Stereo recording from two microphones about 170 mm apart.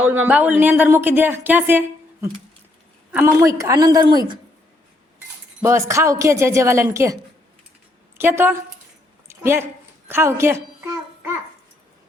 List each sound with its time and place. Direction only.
0.0 s speech: 10° right (ahead or behind)
3.1 s a woman's voice: 10° right (ahead or behind)
5.6 s speech: 15° right (ahead or behind)
8.2 s speech: 10° right (ahead or behind)
9.2 s a sound: 15° right (ahead or behind)
10.1 s speech: 15° right (ahead or behind)